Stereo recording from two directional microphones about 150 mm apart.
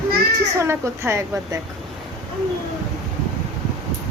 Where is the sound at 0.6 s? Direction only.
20° right (ahead or behind).